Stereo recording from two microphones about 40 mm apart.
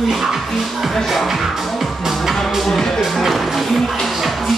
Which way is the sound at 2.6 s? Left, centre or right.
Centre.